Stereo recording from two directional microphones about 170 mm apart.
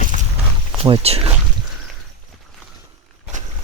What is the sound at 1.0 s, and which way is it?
Speech, 35° right (ahead or behind).